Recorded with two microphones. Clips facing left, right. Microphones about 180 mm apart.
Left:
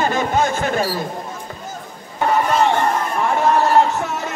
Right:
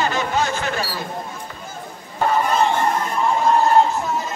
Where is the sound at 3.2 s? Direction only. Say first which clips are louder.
Even; 70° left (ahead or behind).